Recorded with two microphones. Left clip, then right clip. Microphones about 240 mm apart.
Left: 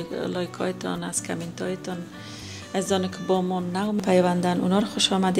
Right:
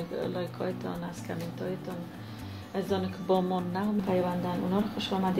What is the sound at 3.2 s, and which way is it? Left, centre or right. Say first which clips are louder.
Speech: left 3 dB; centre.